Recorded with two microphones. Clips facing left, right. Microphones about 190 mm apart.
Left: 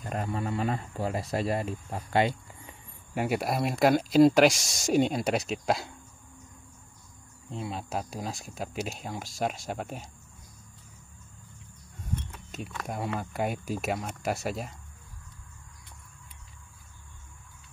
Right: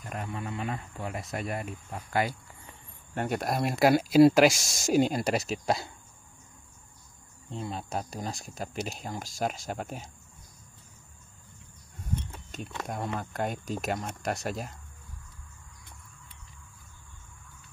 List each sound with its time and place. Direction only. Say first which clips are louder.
0.0 s speech: left 4 dB; 35° left (ahead or behind)
3.2 s speech: left 1 dB; 5° left (ahead or behind)
7.4 s speech: even; centre (ahead or behind)
12.4 s a sound: left 1 dB; 5° left (ahead or behind)
12.8 s speech: left 1 dB; 5° left (ahead or behind)